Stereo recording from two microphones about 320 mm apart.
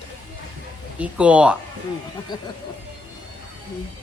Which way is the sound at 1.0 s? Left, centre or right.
Centre.